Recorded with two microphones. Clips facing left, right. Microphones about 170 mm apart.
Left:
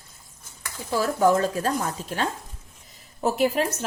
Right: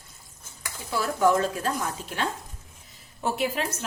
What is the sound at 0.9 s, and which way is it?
Speech, 40° left (ahead or behind).